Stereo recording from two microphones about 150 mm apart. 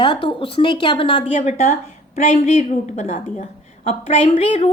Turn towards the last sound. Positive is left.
turn(degrees=40)  # may be behind; listen again after turning